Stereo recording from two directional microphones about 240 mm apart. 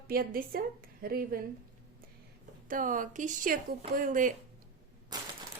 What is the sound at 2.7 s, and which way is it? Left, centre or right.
A woman's voice, right.